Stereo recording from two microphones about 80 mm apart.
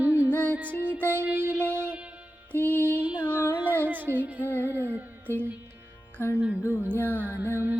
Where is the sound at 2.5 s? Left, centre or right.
Left.